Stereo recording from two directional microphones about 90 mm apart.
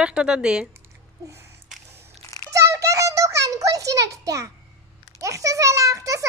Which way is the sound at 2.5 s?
35° right (ahead or behind).